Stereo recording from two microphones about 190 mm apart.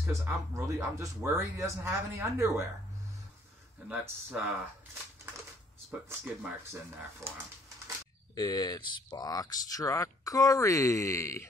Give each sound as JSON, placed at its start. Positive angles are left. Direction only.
{"t": 0.0, "sound": "speech", "side_deg": -10}
{"t": 3.8, "sound": "speech", "side_deg": -10}
{"t": 6.0, "sound": "speech", "side_deg": -10}
{"t": 8.4, "sound": "speech", "side_deg": 20}